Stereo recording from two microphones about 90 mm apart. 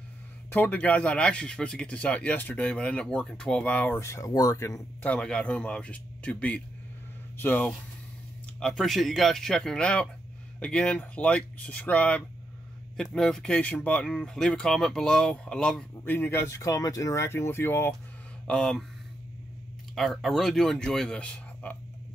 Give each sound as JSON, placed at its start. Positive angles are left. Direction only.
{"t": 0.5, "sound": "speech", "side_deg": 20}
{"t": 4.0, "sound": "speech", "side_deg": 35}
{"t": 5.0, "sound": "speech", "side_deg": 15}
{"t": 8.5, "sound": "speech", "side_deg": 5}
{"t": 16.0, "sound": "speech", "side_deg": 25}
{"t": 18.5, "sound": "speech", "side_deg": 5}
{"t": 20.0, "sound": "speech", "side_deg": 0}